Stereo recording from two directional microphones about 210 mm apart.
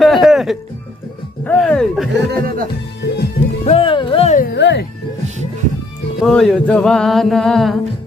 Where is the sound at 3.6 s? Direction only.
25° left (ahead or behind).